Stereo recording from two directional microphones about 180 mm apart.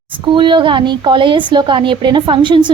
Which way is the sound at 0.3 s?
25° right (ahead or behind).